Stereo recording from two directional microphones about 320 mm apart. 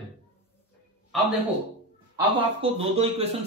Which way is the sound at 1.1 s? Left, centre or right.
Centre.